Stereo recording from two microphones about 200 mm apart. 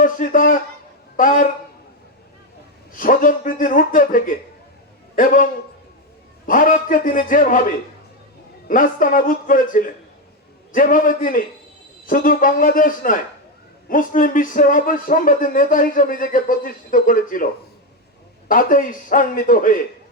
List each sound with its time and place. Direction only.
0.0 s a sound: 40° left (ahead or behind)
1.1 s speech: 40° left (ahead or behind)
2.9 s speech: 45° left (ahead or behind)
8.6 s speech: 45° left (ahead or behind)